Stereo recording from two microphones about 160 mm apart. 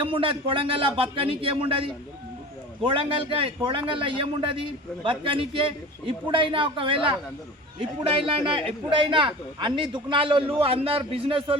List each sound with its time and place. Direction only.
0.0 s a man's voice: 35° right (ahead or behind)
8.3 s a man's voice: 30° right (ahead or behind)